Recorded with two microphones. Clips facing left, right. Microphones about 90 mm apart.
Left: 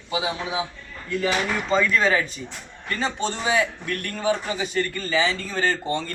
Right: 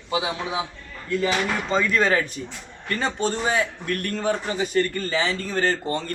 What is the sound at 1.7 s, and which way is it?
Speech, 40° right (ahead or behind).